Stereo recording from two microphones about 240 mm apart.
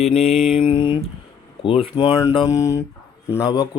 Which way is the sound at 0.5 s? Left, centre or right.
Left.